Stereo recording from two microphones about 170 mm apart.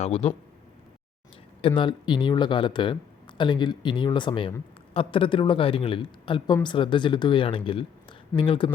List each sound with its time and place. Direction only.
0.0 s speech: 35° left (ahead or behind)
1.6 s speech: 30° left (ahead or behind)